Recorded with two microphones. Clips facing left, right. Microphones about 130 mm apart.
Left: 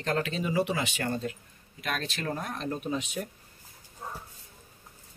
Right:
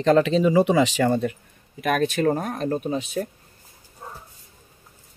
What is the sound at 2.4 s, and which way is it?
Speech, 45° right (ahead or behind).